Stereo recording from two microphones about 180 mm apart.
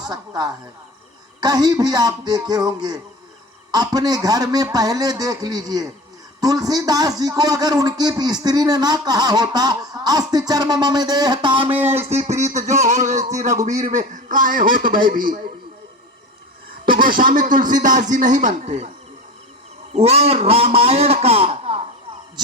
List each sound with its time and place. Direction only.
0.0 s a man's voice: 20° right (ahead or behind); by 15.4 s 50° right (ahead or behind)
16.8 s speech: 50° right (ahead or behind)
19.9 s speech: 35° right (ahead or behind)